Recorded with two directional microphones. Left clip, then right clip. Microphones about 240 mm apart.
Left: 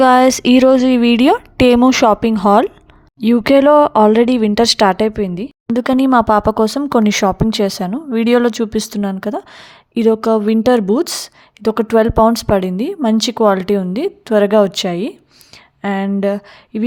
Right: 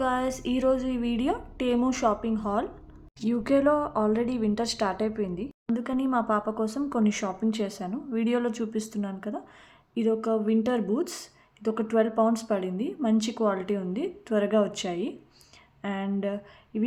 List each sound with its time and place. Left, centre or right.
0.0 s speech: left